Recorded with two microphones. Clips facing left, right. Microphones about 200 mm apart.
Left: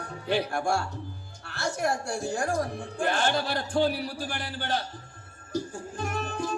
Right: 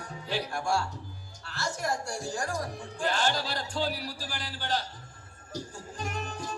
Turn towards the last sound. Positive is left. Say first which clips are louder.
# left 5 dB
turn(degrees=55)  # may be behind; listen again after turning